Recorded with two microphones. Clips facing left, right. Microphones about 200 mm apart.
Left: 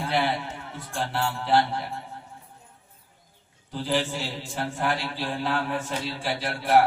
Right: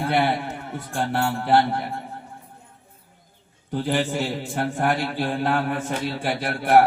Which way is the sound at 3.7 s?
55° right (ahead or behind).